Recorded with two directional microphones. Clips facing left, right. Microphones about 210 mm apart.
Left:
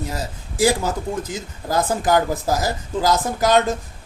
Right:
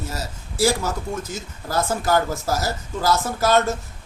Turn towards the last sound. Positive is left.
turn(degrees=15)  # may be behind; listen again after turning